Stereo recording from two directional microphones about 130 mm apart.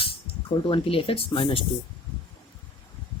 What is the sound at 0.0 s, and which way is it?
Speech, 45° left (ahead or behind).